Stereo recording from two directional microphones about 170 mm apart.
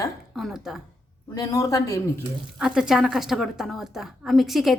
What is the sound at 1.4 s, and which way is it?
Speech, 20° left (ahead or behind).